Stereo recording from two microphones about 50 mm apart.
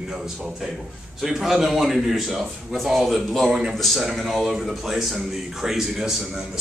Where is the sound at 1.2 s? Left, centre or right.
Centre.